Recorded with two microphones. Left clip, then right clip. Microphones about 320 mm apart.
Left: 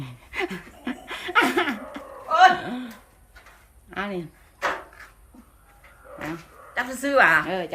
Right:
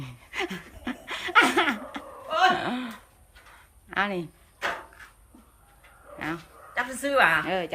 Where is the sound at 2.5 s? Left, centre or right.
Centre.